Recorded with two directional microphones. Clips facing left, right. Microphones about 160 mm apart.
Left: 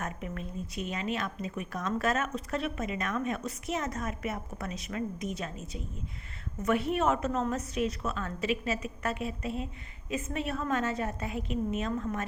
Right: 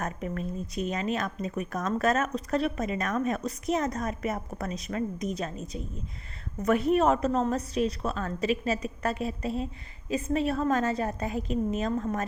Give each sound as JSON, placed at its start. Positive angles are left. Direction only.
{"t": 0.0, "sound": "speech", "side_deg": -40}